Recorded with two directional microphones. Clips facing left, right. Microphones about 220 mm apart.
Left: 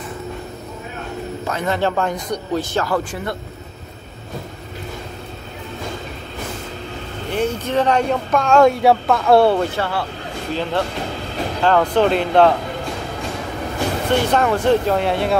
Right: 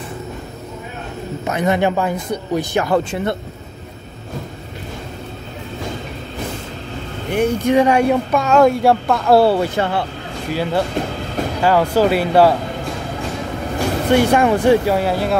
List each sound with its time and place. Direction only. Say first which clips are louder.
1.5 s speech: right 4 dB; 15° right (ahead or behind)
7.3 s speech: right 5 dB; 10° right (ahead or behind)
9.8 s speech: right 3 dB; 20° right (ahead or behind)
10.5 s speech: right 3 dB; 10° right (ahead or behind)
14.1 s speech: right 4 dB; 10° right (ahead or behind)